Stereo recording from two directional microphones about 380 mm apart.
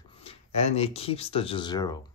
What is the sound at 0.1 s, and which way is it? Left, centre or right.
Speech, centre.